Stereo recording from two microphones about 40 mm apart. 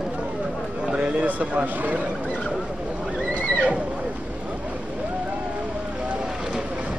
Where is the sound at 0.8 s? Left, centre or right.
Right.